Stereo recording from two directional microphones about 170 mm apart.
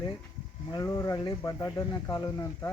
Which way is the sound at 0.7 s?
20° left (ahead or behind).